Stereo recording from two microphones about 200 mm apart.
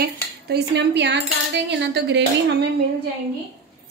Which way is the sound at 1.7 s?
60° right (ahead or behind).